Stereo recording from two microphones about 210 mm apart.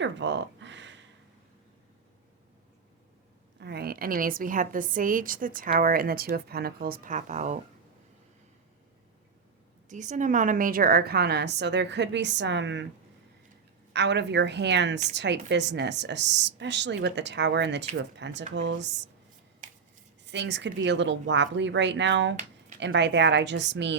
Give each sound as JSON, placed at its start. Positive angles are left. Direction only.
{"t": 0.0, "sound": "a sound", "side_deg": -60}
{"t": 3.6, "sound": "a woman's voice", "side_deg": -50}
{"t": 9.9, "sound": "a woman's voice", "side_deg": -35}
{"t": 13.9, "sound": "a woman's voice", "side_deg": -55}
{"t": 20.2, "sound": "a woman's voice", "side_deg": -55}